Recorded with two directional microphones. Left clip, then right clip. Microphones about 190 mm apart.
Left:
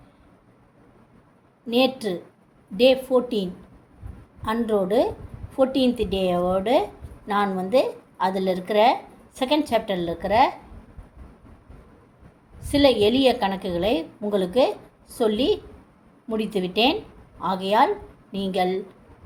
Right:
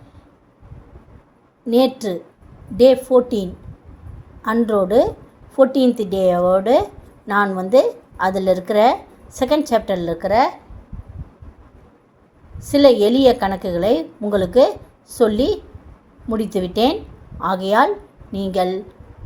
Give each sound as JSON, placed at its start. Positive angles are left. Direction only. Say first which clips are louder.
{"t": 1.6, "sound": "a woman's voice", "louder": "right 5 dB", "side_deg": -25}
{"t": 4.6, "sound": "a woman's voice", "louder": "right 6 dB", "side_deg": -25}
{"t": 12.5, "sound": "a woman's voice", "louder": "right 6 dB", "side_deg": -25}